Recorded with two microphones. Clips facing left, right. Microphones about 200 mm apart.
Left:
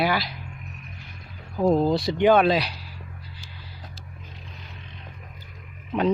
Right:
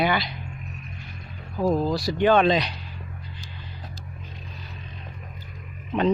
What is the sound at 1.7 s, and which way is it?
Speech, 25° left (ahead or behind).